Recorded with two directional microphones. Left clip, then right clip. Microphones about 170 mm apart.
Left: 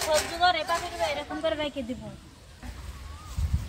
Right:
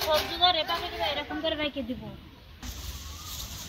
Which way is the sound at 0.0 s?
15° left (ahead or behind).